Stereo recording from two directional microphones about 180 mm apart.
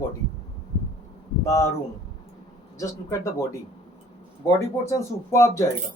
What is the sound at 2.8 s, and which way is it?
Speech, 20° left (ahead or behind).